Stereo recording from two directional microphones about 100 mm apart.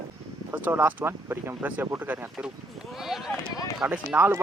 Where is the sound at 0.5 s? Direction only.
15° right (ahead or behind).